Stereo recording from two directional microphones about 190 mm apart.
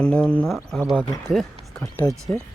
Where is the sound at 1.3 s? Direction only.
Centre (ahead or behind).